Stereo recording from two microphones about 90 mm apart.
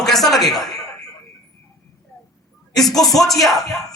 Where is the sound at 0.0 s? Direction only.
5° left (ahead or behind).